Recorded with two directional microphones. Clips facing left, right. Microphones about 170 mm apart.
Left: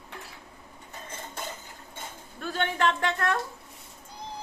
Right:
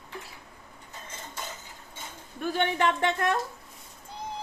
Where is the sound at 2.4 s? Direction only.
15° right (ahead or behind).